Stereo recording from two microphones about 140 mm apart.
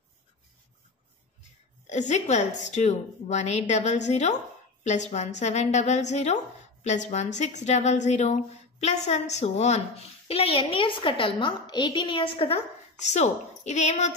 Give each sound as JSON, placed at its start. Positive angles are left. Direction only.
{"t": 1.9, "sound": "a woman's voice", "side_deg": 55}
{"t": 13.0, "sound": "a woman's voice", "side_deg": 55}